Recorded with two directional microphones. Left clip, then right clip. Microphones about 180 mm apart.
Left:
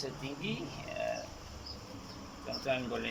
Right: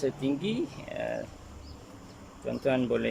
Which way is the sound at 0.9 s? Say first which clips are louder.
Right 2 dB; 50° right (ahead or behind).